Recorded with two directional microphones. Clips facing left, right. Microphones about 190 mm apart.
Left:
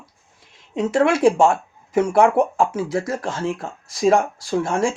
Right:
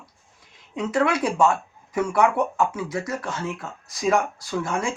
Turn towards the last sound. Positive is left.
turn(degrees=30)  # may be behind; listen again after turning